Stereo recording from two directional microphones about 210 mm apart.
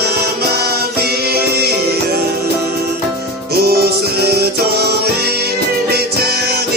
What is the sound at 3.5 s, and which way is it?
Music, 50° right (ahead or behind).